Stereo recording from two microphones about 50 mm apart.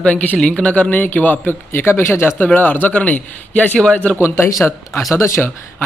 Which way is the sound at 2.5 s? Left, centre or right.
Left.